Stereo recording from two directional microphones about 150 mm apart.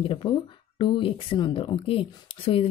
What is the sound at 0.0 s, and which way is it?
Speech, 35° left (ahead or behind).